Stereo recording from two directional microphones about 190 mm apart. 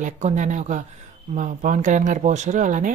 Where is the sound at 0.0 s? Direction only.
40° right (ahead or behind).